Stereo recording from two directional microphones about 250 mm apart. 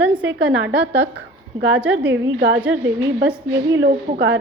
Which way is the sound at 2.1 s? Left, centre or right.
Right.